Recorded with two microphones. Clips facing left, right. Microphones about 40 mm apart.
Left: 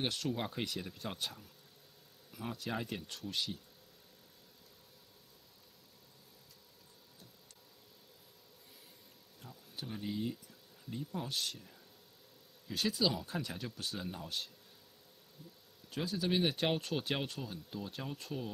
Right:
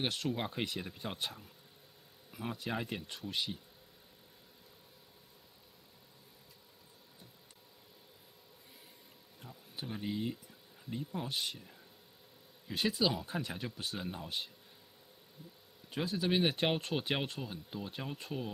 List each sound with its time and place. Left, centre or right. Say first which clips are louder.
0.0 s speech: right 1 dB; centre
9.4 s a sound: right 1 dB; centre
10.9 s speech: right 1 dB; centre
15.9 s speech: right 2 dB; centre